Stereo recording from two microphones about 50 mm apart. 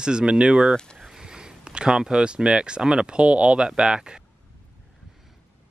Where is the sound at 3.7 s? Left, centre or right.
Centre.